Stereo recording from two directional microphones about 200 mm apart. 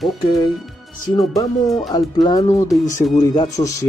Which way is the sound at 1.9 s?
20° left (ahead or behind).